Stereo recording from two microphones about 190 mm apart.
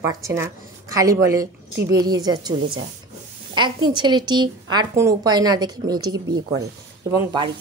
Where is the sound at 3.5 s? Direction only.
25° right (ahead or behind).